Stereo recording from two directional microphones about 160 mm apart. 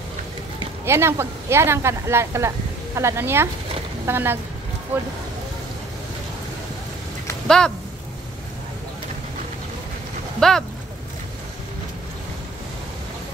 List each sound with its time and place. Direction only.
0.8 s speech: 15° right (ahead or behind)
7.4 s speech: 5° left (ahead or behind)
10.4 s speech: 5° left (ahead or behind)